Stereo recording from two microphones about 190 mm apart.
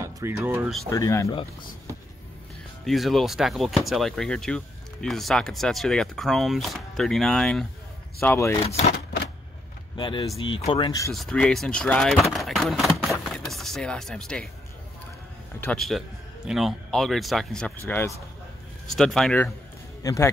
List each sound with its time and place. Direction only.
0.0 s speech: 15° right (ahead or behind)
0.8 s speech: 15° left (ahead or behind)
2.8 s speech: centre (ahead or behind)
8.4 s speech: 15° left (ahead or behind)
8.6 s speech: 35° left (ahead or behind)
8.9 s typewriter: 60° left (ahead or behind)
9.9 s speech: 25° left (ahead or behind)
11.1 s speech: 5° left (ahead or behind)
13.2 s vehicle: centre (ahead or behind)
15.6 s speech: 5° left (ahead or behind)
20.0 s a man's voice: 15° left (ahead or behind)